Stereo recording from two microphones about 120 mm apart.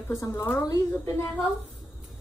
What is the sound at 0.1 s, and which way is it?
Speech, 25° left (ahead or behind).